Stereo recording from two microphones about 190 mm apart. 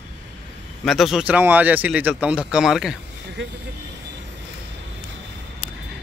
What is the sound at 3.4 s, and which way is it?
Speech, 70° right (ahead or behind).